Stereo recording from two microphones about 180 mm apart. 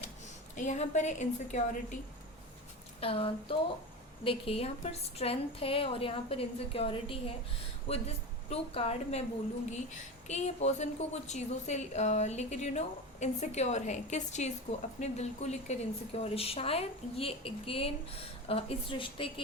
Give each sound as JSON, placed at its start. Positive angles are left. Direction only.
{"t": 0.5, "sound": "a woman's voice", "side_deg": 40}
{"t": 3.0, "sound": "a woman's voice", "side_deg": 30}